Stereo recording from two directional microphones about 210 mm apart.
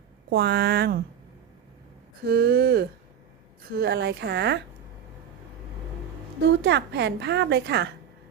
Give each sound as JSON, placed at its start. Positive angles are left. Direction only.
{"t": 0.3, "sound": "a woman's voice", "side_deg": -50}
{"t": 2.2, "sound": "a woman's voice", "side_deg": -50}
{"t": 6.6, "sound": "a woman's voice", "side_deg": -55}